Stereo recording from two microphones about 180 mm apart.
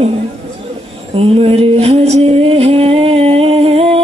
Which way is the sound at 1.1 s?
35° right (ahead or behind).